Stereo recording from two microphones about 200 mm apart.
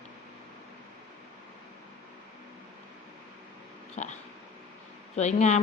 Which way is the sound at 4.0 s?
35° left (ahead or behind).